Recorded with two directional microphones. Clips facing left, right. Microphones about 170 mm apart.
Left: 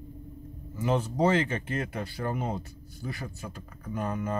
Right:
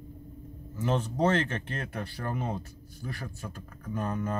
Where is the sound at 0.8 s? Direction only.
10° left (ahead or behind).